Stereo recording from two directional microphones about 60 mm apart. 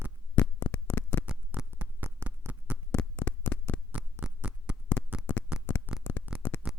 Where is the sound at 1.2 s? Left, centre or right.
Centre.